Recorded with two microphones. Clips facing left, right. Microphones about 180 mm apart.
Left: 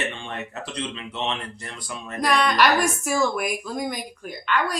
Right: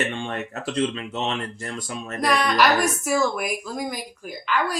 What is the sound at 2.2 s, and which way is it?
A woman's voice, centre (ahead or behind).